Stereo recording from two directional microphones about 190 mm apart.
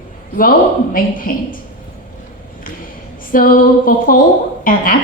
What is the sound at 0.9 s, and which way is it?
Speech, 50° left (ahead or behind).